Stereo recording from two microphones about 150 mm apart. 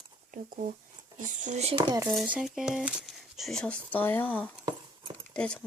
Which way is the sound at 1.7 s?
25° right (ahead or behind).